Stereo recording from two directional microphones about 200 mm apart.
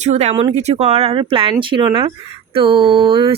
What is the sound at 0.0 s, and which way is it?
Speech, 35° right (ahead or behind).